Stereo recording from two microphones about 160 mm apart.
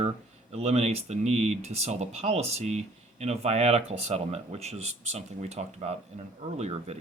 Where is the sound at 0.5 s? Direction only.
40° right (ahead or behind).